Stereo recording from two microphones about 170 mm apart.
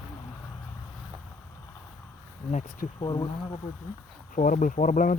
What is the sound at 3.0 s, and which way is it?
Speech, 25° left (ahead or behind).